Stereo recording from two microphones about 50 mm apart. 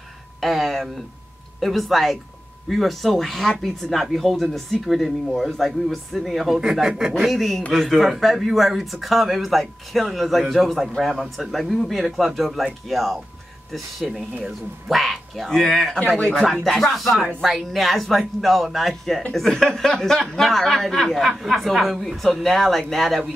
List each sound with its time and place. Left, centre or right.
0.4 s speech: centre
6.6 s speech: centre
7.2 s speech: centre
16.2 s speech: centre
16.6 s speech: centre